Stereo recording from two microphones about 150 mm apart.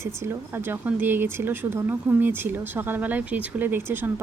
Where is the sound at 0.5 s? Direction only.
15° right (ahead or behind).